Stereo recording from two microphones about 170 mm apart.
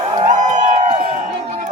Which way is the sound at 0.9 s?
30° right (ahead or behind).